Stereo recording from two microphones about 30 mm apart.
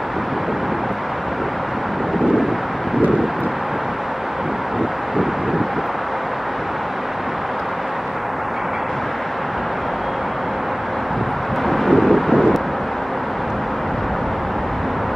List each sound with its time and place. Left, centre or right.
11.6 s vehicle: centre